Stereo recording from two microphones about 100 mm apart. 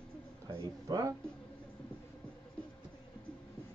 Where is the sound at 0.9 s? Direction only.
40° right (ahead or behind).